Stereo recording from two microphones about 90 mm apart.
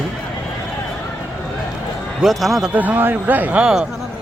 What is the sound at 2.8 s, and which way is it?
Speech, 20° right (ahead or behind).